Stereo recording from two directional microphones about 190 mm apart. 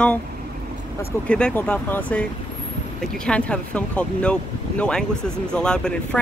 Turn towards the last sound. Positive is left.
turn(degrees=5)  # may be behind; listen again after turning